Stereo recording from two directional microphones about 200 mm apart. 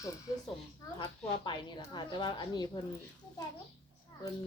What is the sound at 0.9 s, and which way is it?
Speech, 25° left (ahead or behind).